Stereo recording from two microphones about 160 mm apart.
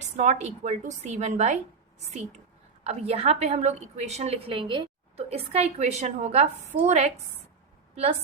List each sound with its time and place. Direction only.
0.0 s a woman's voice: 45° right (ahead or behind)
2.8 s a woman's voice: 40° right (ahead or behind)